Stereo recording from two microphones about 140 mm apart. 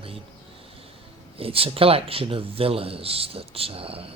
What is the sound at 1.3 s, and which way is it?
Speech, 40° right (ahead or behind).